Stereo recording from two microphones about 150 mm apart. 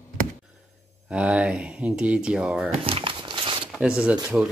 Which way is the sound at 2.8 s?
35° right (ahead or behind).